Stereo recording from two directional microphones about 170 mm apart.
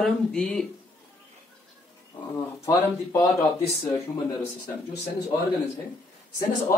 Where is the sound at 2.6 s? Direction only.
20° left (ahead or behind).